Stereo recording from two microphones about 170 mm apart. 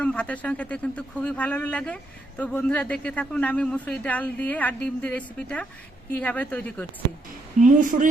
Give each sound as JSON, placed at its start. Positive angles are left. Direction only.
{"t": 0.0, "sound": "speech", "side_deg": 5}
{"t": 7.6, "sound": "a woman's voice", "side_deg": -50}